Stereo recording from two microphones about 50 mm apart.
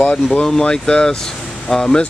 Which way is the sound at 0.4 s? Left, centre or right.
Centre.